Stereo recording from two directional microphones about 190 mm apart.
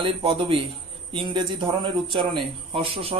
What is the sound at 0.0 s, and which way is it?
A man's voice, 25° right (ahead or behind).